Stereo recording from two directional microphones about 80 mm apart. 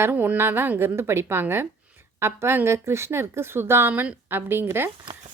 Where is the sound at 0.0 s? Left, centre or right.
Right.